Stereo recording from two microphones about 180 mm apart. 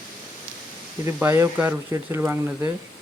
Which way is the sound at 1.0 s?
15° right (ahead or behind).